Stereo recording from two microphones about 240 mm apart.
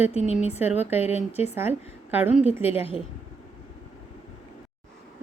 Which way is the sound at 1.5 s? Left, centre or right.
Centre.